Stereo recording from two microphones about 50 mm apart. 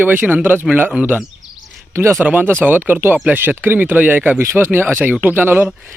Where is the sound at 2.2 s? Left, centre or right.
Right.